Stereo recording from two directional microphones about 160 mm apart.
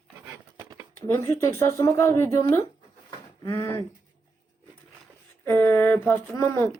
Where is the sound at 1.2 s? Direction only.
15° left (ahead or behind).